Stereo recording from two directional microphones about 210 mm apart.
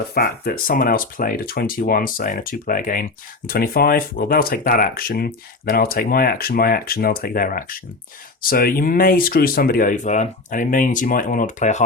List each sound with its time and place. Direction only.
0.1 s speech: 45° left (ahead or behind)